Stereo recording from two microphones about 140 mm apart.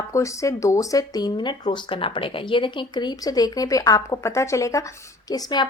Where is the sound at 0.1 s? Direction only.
20° left (ahead or behind).